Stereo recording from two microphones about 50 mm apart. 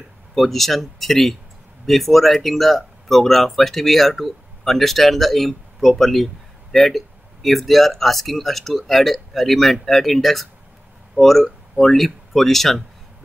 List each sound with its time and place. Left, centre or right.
0.3 s speech: centre